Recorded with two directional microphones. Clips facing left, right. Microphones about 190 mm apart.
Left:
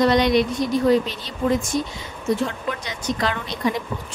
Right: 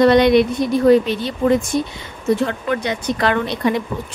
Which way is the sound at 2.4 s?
60° right (ahead or behind).